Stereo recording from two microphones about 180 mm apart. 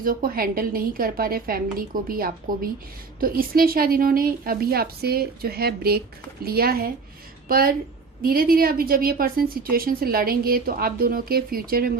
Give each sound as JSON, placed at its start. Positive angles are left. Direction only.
{"t": 0.0, "sound": "a woman's voice", "side_deg": -50}